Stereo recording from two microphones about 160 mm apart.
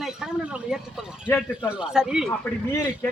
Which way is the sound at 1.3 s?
15° left (ahead or behind).